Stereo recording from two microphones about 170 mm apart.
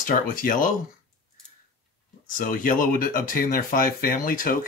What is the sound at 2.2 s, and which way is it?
Speech, 55° left (ahead or behind).